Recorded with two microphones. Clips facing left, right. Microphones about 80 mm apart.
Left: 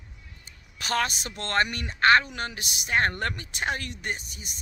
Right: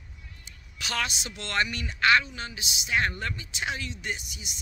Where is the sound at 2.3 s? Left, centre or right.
Left.